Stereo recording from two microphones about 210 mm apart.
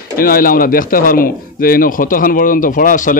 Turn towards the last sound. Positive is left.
turn(degrees=40)  # may be behind; listen again after turning